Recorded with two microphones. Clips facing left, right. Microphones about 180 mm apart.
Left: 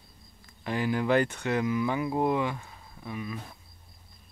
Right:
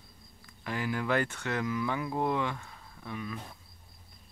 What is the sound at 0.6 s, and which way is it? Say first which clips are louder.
Speech: left 5 dB; 25° left (ahead or behind).